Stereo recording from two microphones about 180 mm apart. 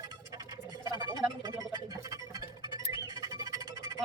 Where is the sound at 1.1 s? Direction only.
20° right (ahead or behind).